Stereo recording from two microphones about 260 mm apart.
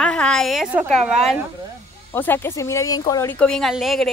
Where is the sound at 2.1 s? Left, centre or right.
Centre.